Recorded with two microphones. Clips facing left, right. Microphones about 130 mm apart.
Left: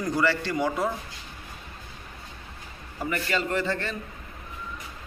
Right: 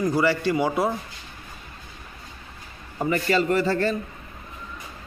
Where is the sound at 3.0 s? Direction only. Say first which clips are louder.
Right 6 dB; 35° right (ahead or behind).